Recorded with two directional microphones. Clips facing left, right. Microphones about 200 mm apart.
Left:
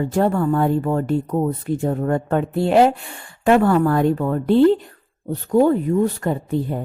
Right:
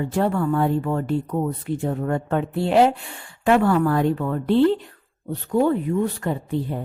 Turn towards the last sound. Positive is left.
turn(degrees=45)  # may be behind; listen again after turning